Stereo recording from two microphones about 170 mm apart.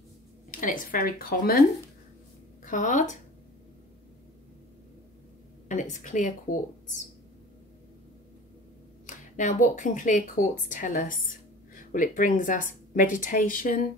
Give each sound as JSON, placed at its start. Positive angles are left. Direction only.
{"t": 0.5, "sound": "speech", "side_deg": 50}
{"t": 2.6, "sound": "speech", "side_deg": 45}
{"t": 5.7, "sound": "speech", "side_deg": 45}
{"t": 9.0, "sound": "a woman's voice", "side_deg": 45}